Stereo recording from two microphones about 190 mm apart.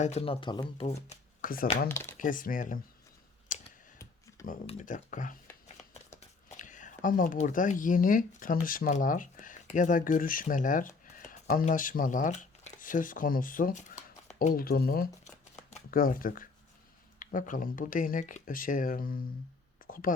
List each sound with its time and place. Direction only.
0.0 s speech: 35° left (ahead or behind)
0.9 s speech: 35° left (ahead or behind)
1.4 s speech: 50° left (ahead or behind)
1.9 s speech: 15° left (ahead or behind)
2.1 s speech: 45° left (ahead or behind)
3.5 s a sound: 45° left (ahead or behind)
4.6 s a woman's voice: 40° left (ahead or behind)